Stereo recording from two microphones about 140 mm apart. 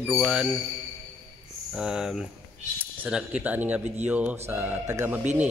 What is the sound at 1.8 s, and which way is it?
A man's voice, 5° right (ahead or behind).